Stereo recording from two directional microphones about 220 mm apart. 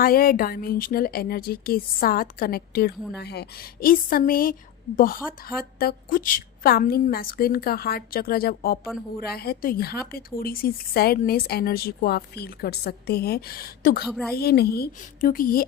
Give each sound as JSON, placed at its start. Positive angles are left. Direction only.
{"t": 0.0, "sound": "speech", "side_deg": 40}
{"t": 5.8, "sound": "a woman's voice", "side_deg": 40}
{"t": 14.1, "sound": "a woman's voice", "side_deg": 0}
{"t": 14.3, "sound": "a woman's voice", "side_deg": 45}